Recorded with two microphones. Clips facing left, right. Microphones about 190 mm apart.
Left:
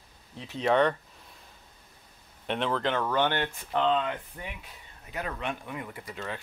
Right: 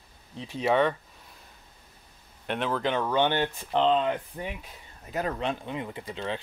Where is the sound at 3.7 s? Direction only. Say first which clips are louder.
Right 3 dB; 30° right (ahead or behind).